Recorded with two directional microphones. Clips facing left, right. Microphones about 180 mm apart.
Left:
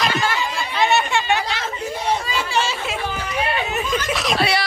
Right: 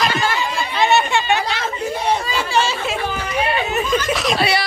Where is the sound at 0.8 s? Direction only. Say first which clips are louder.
Right 2 dB; 30° right (ahead or behind).